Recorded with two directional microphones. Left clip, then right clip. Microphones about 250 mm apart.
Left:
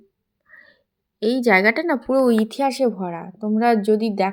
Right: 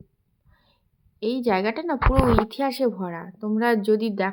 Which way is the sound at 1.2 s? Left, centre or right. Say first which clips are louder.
Left 7 dB; centre.